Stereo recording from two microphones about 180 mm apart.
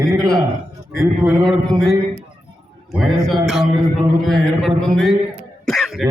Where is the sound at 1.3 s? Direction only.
Centre (ahead or behind).